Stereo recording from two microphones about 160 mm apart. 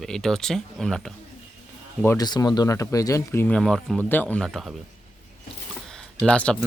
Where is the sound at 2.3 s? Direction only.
25° left (ahead or behind); by 4.7 s centre (ahead or behind).